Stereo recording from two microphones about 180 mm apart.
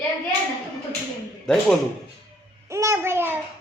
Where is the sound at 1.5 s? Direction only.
5° left (ahead or behind).